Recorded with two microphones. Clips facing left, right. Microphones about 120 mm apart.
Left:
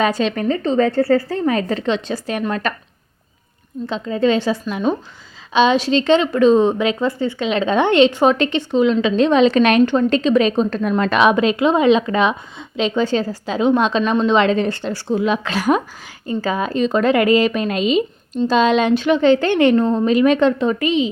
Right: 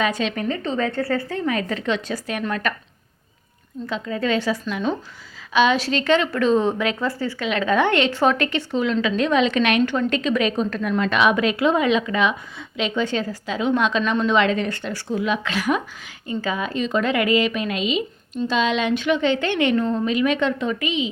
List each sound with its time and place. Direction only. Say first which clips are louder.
0.0 s a woman's voice: left 5 dB; 35° left (ahead or behind)
3.8 s a woman's voice: left 6 dB; 25° left (ahead or behind)
10.9 s a woman's voice: left 4 dB; 40° left (ahead or behind)